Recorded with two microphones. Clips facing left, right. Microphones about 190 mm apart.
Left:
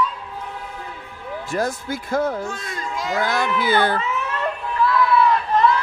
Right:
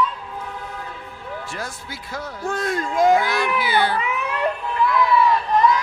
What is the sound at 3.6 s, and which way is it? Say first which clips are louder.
Speech: left 4 dB; 50° left (ahead or behind).